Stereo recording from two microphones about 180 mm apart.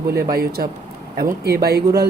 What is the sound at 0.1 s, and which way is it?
Speech, 60° right (ahead or behind).